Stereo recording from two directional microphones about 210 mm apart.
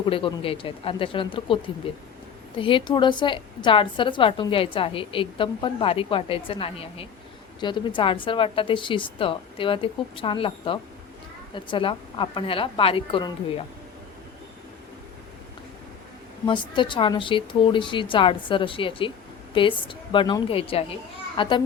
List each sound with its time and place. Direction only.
0.0 s a woman's voice: 25° left (ahead or behind)
16.5 s a woman's voice: 20° left (ahead or behind)